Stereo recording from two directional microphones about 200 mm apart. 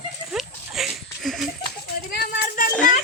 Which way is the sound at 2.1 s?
45° left (ahead or behind).